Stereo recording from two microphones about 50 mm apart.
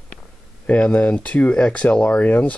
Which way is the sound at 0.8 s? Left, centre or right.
Centre.